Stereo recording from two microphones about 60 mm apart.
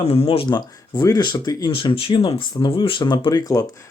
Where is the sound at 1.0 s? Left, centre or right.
Left.